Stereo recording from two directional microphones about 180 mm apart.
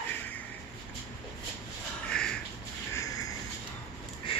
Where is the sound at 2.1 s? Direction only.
5° left (ahead or behind).